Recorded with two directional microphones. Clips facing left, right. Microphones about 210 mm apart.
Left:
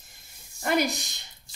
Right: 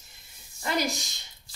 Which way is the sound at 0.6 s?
60° left (ahead or behind).